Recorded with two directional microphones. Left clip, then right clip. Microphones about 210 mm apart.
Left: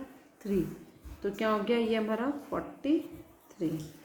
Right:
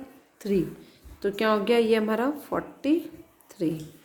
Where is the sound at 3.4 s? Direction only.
55° right (ahead or behind).